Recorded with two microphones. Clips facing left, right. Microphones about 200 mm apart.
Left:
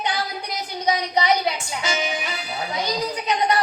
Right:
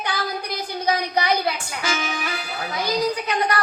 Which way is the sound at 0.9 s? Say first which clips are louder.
Left 1 dB; 20° left (ahead or behind).